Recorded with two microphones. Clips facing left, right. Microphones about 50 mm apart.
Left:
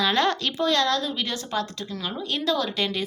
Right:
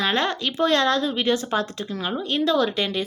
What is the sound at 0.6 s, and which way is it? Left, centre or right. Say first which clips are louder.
A woman's voice: right 5 dB; right.